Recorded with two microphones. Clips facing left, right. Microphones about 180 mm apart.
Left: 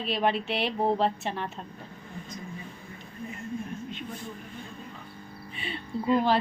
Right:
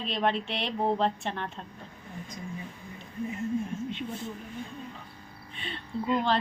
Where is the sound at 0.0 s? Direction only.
5° left (ahead or behind).